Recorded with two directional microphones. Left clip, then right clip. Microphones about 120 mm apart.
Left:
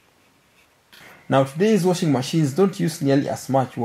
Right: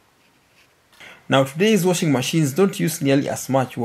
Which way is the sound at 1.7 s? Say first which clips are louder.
Right 1 dB; 15° right (ahead or behind).